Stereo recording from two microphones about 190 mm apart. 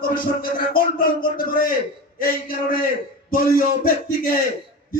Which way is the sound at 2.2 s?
50° left (ahead or behind).